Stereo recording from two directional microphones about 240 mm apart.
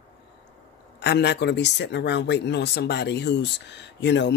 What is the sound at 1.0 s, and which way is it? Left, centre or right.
Speech, left.